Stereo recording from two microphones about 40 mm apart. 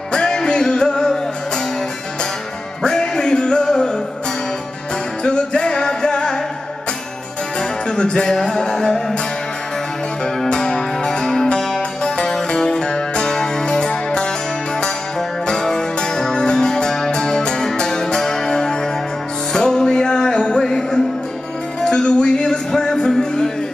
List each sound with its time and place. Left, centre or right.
0.1 s music: left
2.8 s music: left
5.2 s music: left
7.9 s a sound: left
10.2 s music: centre
15.4 s music: centre